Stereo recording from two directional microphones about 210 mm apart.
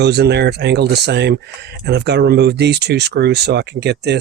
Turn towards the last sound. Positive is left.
turn(degrees=-50)  # may be behind; listen again after turning